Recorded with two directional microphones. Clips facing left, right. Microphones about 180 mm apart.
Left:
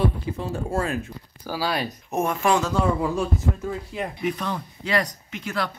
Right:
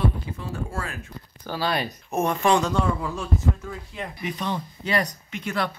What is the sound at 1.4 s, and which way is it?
Speech, 5° left (ahead or behind).